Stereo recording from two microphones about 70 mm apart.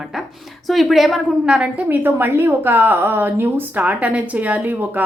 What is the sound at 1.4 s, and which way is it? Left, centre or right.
Speech, centre.